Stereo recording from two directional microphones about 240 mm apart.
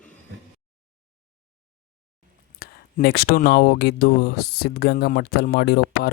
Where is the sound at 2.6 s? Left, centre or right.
Left.